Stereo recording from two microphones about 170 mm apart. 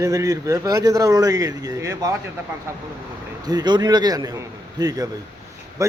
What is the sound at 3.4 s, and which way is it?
Speech, 25° right (ahead or behind).